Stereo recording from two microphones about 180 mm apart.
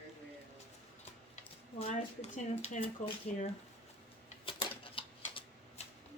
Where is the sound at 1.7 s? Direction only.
40° left (ahead or behind).